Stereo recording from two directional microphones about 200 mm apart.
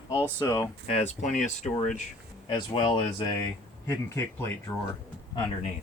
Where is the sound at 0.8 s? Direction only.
30° left (ahead or behind).